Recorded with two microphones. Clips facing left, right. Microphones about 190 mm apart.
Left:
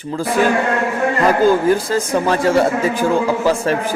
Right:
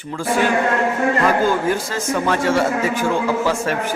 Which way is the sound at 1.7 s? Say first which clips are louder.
Left 5 dB; 35° left (ahead or behind).